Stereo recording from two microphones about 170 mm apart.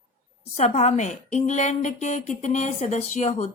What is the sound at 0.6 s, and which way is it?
Speech, 45° left (ahead or behind).